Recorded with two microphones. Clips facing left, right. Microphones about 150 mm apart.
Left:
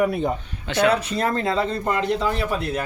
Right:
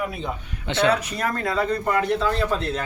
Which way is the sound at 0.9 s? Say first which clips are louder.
Left 2 dB; 30° left (ahead or behind).